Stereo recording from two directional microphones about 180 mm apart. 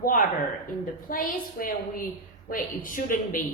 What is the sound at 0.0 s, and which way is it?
A woman's voice, 45° left (ahead or behind).